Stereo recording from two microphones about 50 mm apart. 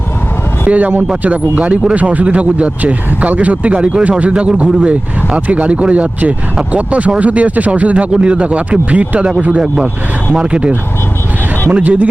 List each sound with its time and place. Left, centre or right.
0.7 s speech: right
10.4 s speech: right
11.7 s speech: right